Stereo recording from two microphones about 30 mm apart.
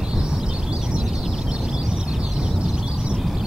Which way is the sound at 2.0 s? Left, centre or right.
Right.